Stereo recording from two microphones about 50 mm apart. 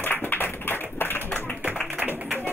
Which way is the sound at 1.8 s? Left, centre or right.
Right.